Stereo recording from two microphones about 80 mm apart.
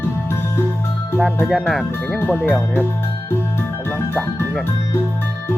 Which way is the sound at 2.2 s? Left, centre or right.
Left.